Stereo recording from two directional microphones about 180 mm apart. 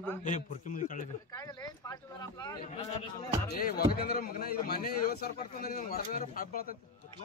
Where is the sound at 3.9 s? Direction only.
55° left (ahead or behind).